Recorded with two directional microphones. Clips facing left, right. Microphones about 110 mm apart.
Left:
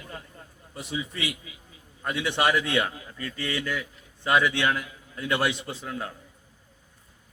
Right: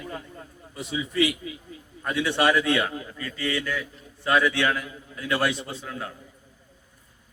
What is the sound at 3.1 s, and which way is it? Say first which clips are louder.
Speech: right 2 dB; 35° left (ahead or behind).